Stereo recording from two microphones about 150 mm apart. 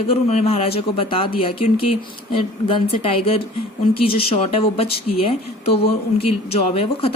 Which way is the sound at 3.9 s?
40° left (ahead or behind).